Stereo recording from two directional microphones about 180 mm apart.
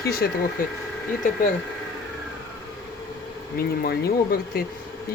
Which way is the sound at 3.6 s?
55° left (ahead or behind).